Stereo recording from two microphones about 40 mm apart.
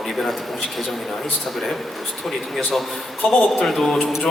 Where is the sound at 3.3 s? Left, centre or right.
Centre.